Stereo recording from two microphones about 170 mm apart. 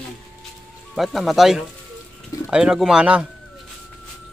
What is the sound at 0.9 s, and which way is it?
Speech, centre (ahead or behind).